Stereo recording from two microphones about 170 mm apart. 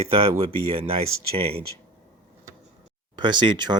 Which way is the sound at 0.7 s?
35° right (ahead or behind).